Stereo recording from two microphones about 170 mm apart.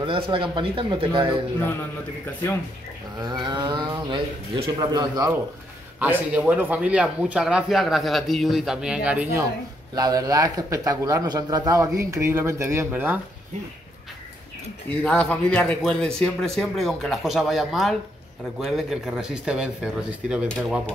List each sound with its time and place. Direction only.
0.0 s speech: 30° right (ahead or behind)
3.3 s speech: 25° right (ahead or behind)
5.9 s speech: 10° right (ahead or behind)
14.9 s speech: 5° left (ahead or behind)